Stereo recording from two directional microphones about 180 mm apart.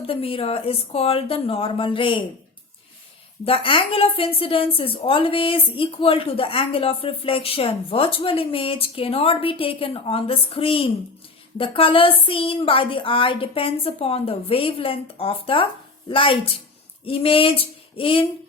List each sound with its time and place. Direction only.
0.1 s a woman's voice: 30° left (ahead or behind)
3.4 s a woman's voice: 30° left (ahead or behind)